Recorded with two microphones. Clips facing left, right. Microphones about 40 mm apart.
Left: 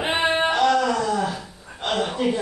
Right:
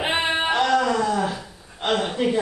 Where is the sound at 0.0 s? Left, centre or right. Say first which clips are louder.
Left 1 dB; centre.